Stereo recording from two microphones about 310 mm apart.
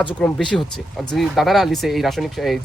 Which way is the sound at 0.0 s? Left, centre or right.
Centre.